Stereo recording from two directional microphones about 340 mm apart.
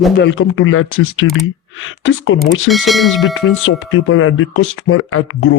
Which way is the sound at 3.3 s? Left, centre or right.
Left.